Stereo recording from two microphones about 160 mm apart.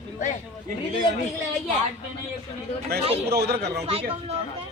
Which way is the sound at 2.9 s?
75° right (ahead or behind).